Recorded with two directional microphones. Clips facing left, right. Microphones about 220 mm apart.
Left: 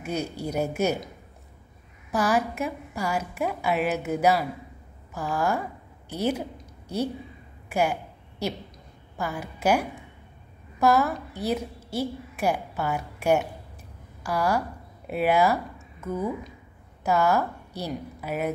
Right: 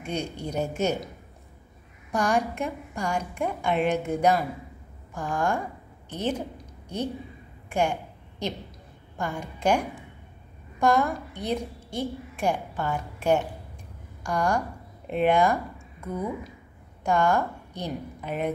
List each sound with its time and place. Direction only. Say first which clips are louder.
0.0 s a woman's voice: left 2 dB; 5° left (ahead or behind)
7.7 s a sound: left 1 dB; 5° left (ahead or behind)
9.1 s a woman's voice: even; 5° left (ahead or behind)